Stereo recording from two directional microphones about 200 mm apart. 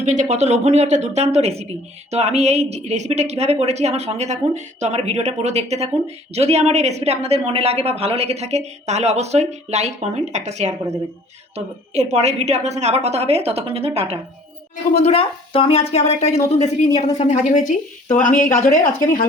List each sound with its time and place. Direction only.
0.1 s speech: 35° right (ahead or behind)
14.9 s speech: 30° left (ahead or behind)